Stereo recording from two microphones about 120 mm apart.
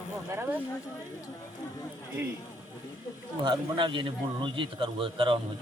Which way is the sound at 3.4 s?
40° right (ahead or behind).